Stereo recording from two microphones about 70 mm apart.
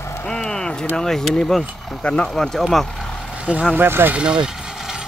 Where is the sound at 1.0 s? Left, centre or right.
Centre.